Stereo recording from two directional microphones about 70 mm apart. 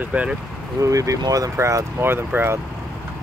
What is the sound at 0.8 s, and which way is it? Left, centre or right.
Speech, right.